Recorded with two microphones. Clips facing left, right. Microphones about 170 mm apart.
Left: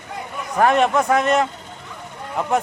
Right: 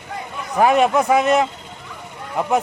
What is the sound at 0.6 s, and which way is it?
A man's voice, 5° right (ahead or behind).